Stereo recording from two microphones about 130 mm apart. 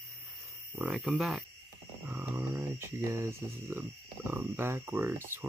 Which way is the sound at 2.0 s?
15° right (ahead or behind).